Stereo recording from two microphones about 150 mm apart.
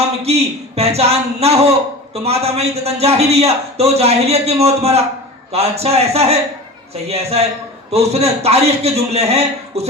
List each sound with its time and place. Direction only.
0.2 s a man's voice: 45° right (ahead or behind)